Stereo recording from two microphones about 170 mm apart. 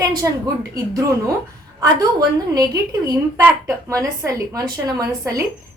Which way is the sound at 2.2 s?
20° right (ahead or behind).